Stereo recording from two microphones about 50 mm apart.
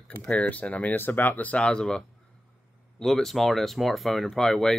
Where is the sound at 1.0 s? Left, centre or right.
Left; by 2.0 s centre.